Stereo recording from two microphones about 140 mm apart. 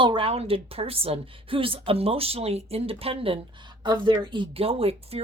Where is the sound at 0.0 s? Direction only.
40° right (ahead or behind).